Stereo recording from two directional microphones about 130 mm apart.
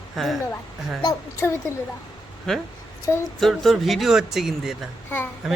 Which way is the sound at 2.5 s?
5° left (ahead or behind).